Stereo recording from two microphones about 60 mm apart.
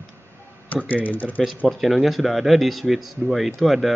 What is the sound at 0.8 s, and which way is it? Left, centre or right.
Speech, left.